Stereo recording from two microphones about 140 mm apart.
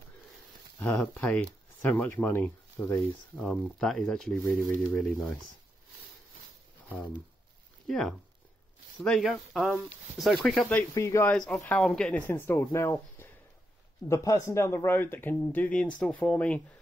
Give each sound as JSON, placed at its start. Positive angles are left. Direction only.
{"t": 0.7, "sound": "speech", "side_deg": 10}
{"t": 3.3, "sound": "speech", "side_deg": 0}
{"t": 6.9, "sound": "speech", "side_deg": 10}